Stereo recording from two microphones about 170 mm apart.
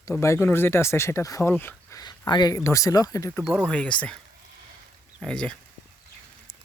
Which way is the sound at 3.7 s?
5° left (ahead or behind).